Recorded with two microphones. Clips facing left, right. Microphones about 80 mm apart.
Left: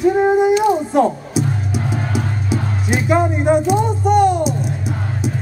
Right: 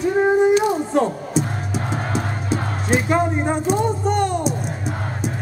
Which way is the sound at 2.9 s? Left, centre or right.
Centre.